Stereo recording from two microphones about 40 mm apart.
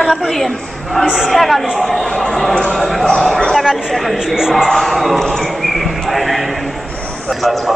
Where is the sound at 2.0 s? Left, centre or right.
Centre.